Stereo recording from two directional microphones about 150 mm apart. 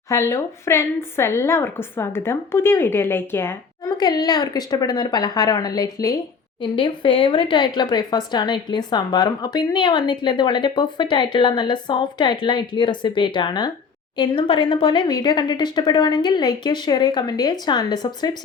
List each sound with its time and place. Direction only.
0.1 s a woman's voice: 20° left (ahead or behind)
3.9 s speech: 25° left (ahead or behind)